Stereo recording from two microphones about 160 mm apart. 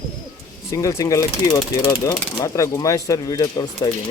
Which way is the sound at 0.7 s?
20° left (ahead or behind).